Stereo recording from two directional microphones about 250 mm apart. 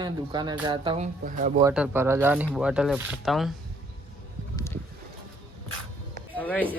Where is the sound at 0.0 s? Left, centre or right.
Centre.